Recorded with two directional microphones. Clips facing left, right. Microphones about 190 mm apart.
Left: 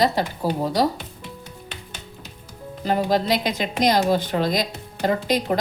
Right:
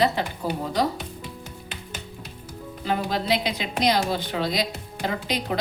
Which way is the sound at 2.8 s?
40° left (ahead or behind).